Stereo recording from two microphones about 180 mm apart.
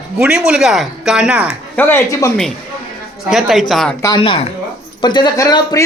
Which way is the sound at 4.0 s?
20° left (ahead or behind).